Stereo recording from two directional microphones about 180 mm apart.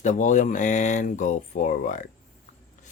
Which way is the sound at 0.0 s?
45° left (ahead or behind).